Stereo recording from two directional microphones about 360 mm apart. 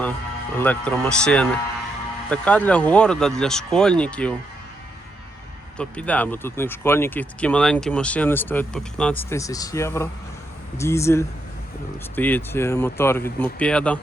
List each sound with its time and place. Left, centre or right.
0.5 s speech: centre
5.7 s speech: centre